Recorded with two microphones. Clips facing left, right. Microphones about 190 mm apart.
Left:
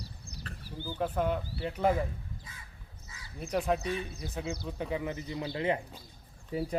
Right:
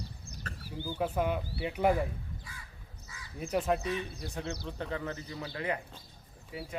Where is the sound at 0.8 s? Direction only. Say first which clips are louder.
Even; 10° right (ahead or behind).